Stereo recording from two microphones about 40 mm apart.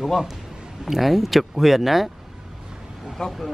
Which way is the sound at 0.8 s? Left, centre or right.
Centre.